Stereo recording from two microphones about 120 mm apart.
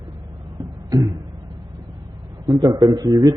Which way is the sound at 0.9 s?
30° right (ahead or behind).